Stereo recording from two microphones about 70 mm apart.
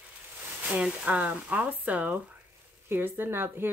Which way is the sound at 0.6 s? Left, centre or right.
Centre.